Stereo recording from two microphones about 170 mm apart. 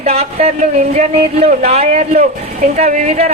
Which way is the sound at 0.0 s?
35° right (ahead or behind).